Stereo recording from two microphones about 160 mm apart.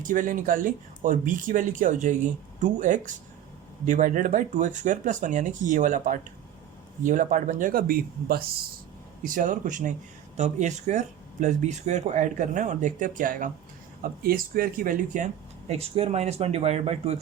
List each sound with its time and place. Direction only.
0.0 s speech: 55° right (ahead or behind)
9.2 s speech: 55° right (ahead or behind)